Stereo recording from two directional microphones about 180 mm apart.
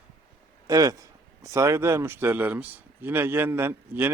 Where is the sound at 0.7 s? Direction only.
20° right (ahead or behind).